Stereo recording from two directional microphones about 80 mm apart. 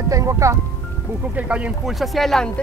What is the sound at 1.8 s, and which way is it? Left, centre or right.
Speech, centre.